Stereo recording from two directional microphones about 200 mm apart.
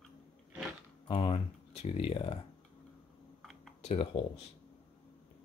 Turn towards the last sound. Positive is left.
turn(degrees=30)  # may be behind; listen again after turning